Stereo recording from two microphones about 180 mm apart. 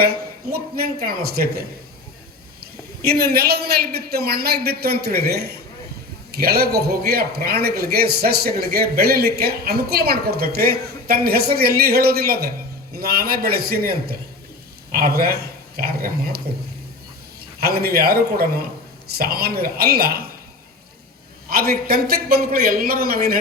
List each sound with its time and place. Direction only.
0.0 s a man's voice: 55° right (ahead or behind)
3.0 s a man's voice: 60° right (ahead or behind)
17.6 s a man's voice: 60° right (ahead or behind)
21.5 s a man's voice: 55° right (ahead or behind)